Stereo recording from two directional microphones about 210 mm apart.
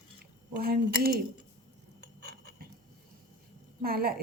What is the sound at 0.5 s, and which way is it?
Speech, 45° right (ahead or behind).